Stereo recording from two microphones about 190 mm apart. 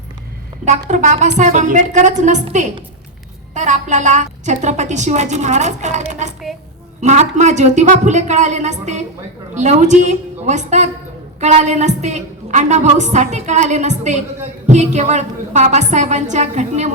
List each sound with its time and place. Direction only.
0.9 s a woman's voice: 40° right (ahead or behind)